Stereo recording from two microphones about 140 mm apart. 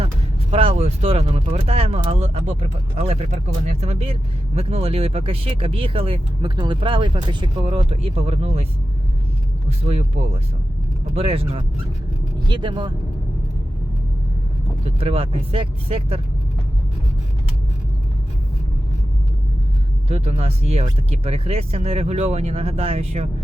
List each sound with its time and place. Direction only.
0.5 s speech: 45° right (ahead or behind)
9.6 s speech: 50° right (ahead or behind)
11.1 s speech: 45° right (ahead or behind)
12.4 s speech: 35° right (ahead or behind)
14.8 s speech: 45° right (ahead or behind)
20.1 s speech: 45° right (ahead or behind)